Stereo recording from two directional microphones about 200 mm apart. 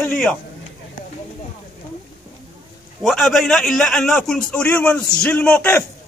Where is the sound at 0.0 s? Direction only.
5° left (ahead or behind).